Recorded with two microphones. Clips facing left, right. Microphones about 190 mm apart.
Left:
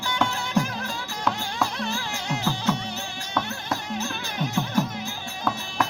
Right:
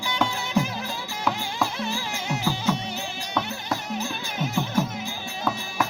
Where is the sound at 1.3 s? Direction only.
5° right (ahead or behind).